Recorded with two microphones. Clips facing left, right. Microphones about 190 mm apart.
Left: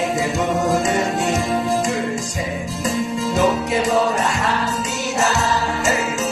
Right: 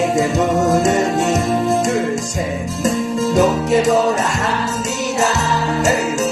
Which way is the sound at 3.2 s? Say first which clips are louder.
Right 5 dB; 45° right (ahead or behind).